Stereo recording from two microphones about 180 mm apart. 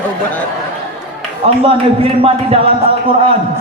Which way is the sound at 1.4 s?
30° right (ahead or behind).